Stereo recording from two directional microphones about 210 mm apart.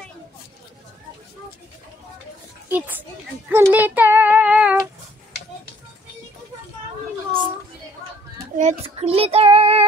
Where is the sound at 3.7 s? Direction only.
10° right (ahead or behind).